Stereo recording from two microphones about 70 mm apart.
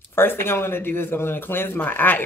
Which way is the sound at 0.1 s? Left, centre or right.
Left.